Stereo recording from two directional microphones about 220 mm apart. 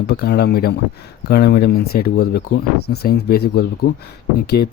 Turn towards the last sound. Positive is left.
turn(degrees=45)  # may be behind; listen again after turning